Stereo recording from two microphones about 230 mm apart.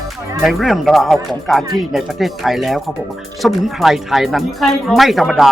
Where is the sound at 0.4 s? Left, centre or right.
Centre.